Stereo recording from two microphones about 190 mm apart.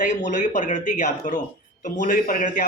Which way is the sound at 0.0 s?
40° left (ahead or behind).